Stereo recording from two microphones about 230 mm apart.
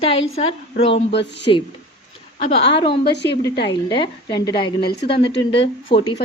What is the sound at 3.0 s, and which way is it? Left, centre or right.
Speech, left.